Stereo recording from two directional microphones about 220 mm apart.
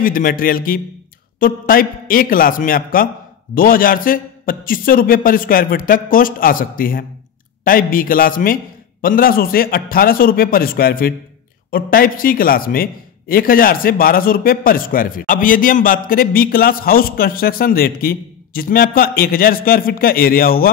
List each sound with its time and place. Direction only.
0.0 s a man's voice: 40° left (ahead or behind)